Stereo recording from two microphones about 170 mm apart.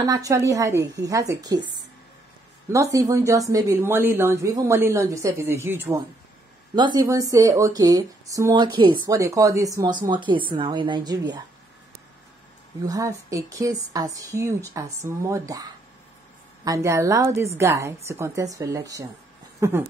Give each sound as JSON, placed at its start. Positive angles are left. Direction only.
{"t": 0.0, "sound": "speech", "side_deg": -20}
{"t": 2.7, "sound": "speech", "side_deg": -20}
{"t": 6.7, "sound": "speech", "side_deg": -25}
{"t": 12.8, "sound": "speech", "side_deg": -20}